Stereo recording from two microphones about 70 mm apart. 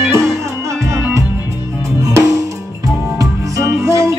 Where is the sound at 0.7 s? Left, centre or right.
Right.